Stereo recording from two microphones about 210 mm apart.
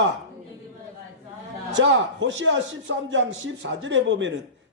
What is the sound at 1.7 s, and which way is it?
A man's voice, 60° right (ahead or behind).